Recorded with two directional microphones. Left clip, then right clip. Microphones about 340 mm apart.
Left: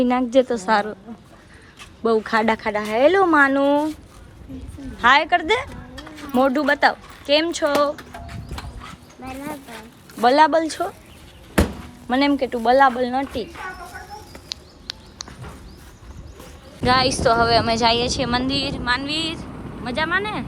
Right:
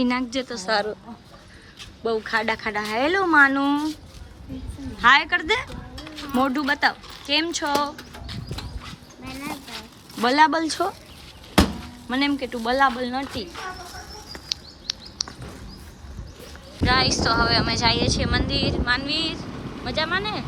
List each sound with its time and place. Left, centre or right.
0.0 s a woman's voice: centre
2.0 s a woman's voice: centre
4.9 s a woman's voice: centre
10.2 s a woman's voice: centre
12.0 s a woman's voice: centre
14.5 s a sound: centre
16.8 s a woman's voice: centre